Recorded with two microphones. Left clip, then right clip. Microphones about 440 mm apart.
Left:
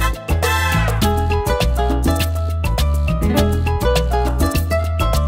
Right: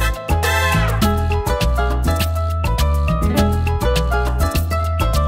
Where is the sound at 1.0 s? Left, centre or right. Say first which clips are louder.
Left 1 dB; left.